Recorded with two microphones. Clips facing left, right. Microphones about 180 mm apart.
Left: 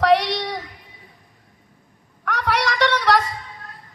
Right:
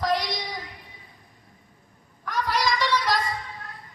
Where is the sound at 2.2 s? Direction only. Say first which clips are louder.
Left 3 dB; 70° left (ahead or behind).